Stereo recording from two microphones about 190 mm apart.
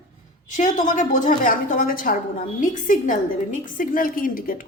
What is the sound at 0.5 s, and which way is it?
Speech, 40° left (ahead or behind).